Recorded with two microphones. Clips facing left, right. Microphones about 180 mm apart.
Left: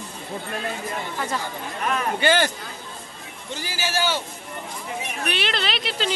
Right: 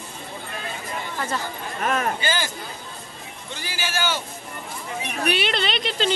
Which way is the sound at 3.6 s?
40° left (ahead or behind).